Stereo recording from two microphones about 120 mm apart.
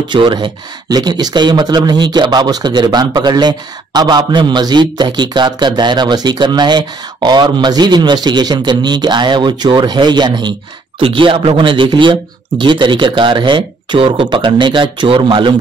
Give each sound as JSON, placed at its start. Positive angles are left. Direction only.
{"t": 0.1, "sound": "a man's voice", "side_deg": -40}